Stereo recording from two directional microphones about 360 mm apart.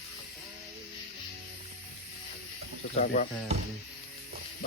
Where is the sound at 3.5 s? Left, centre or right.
Centre.